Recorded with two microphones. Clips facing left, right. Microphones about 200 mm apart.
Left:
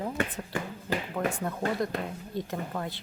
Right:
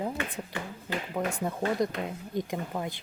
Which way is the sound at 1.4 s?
15° right (ahead or behind).